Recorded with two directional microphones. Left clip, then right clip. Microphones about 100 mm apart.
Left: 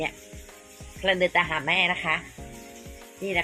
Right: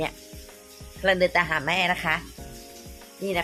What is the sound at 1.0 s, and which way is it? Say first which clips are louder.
Speech: right 1 dB; 20° right (ahead or behind).